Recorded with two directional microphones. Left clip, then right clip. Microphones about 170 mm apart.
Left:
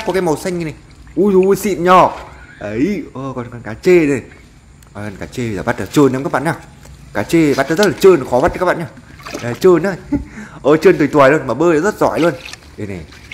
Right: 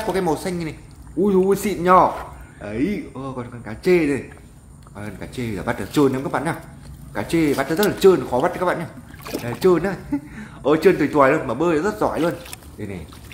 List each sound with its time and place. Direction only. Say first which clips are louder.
0.1 s speech: left 7 dB; 30° left (ahead or behind)